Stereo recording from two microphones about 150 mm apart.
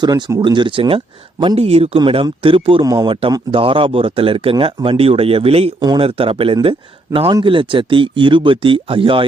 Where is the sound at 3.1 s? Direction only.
35° right (ahead or behind).